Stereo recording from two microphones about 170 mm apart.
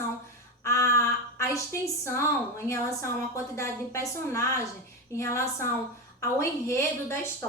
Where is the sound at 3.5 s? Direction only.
15° left (ahead or behind).